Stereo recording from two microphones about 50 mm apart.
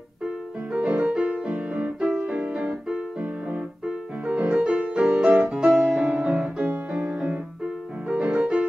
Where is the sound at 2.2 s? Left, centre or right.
Right.